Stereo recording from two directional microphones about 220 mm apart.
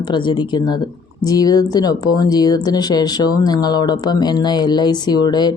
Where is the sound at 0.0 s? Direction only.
20° left (ahead or behind).